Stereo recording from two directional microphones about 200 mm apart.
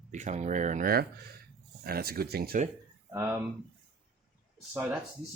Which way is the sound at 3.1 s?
15° right (ahead or behind).